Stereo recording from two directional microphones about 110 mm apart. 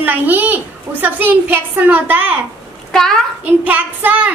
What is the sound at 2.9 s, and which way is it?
Speech, 5° left (ahead or behind).